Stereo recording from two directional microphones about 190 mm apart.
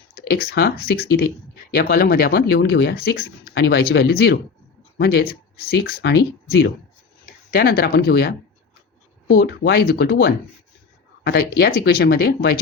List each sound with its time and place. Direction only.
0.1 s speech: 55° left (ahead or behind)